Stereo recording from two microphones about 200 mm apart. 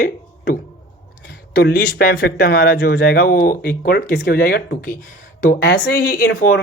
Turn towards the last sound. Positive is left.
turn(degrees=50)  # may be behind; listen again after turning